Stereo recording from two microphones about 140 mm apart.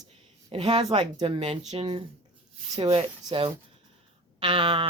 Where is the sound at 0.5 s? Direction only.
45° right (ahead or behind).